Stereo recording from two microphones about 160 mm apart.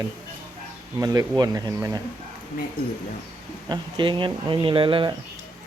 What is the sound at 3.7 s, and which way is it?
Speech, 30° right (ahead or behind).